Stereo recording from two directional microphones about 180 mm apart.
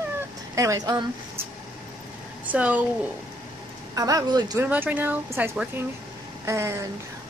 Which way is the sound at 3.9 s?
20° right (ahead or behind).